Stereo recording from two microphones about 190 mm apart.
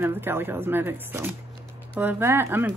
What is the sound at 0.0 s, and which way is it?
A woman's voice, 10° right (ahead or behind).